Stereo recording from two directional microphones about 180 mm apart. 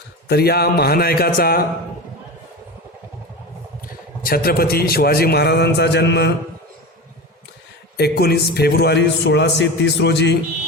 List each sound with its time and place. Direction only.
0.3 s a man's voice: 60° left (ahead or behind)
4.2 s a man's voice: 55° left (ahead or behind); by 6.3 s 75° left (ahead or behind)
7.9 s a man's voice: 65° left (ahead or behind)